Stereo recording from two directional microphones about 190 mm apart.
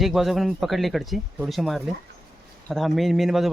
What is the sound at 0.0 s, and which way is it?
Speech, centre (ahead or behind).